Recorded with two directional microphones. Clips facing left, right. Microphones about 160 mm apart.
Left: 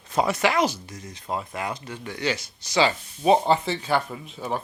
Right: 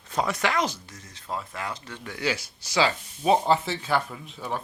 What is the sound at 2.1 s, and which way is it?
Speech, 5° right (ahead or behind).